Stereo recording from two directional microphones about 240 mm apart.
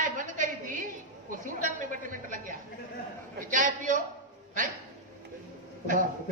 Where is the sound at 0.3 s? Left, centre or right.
Right.